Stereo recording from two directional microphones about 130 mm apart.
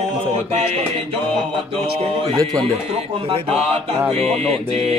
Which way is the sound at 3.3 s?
50° right (ahead or behind).